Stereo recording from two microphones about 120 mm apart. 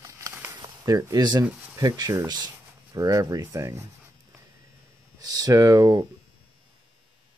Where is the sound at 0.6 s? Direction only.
30° right (ahead or behind).